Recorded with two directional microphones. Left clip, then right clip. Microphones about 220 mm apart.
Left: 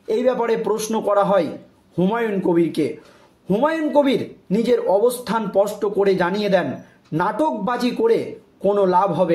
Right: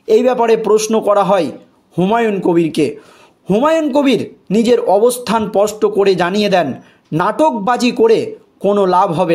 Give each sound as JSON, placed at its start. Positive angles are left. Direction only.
{"t": 0.0, "sound": "a man's voice", "side_deg": -40}